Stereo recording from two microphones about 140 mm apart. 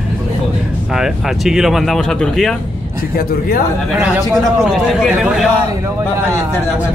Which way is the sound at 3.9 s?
15° right (ahead or behind).